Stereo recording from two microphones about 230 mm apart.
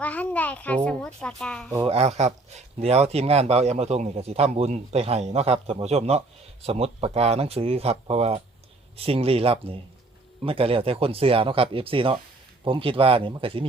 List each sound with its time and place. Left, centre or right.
0.0 s a child's voice: centre
1.7 s speech: right